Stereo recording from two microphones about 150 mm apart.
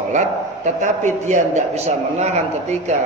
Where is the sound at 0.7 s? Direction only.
55° right (ahead or behind).